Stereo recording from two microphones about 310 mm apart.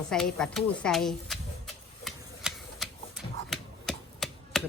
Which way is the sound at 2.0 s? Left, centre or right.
Centre.